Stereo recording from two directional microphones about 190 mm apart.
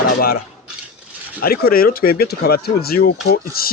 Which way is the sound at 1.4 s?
50° left (ahead or behind).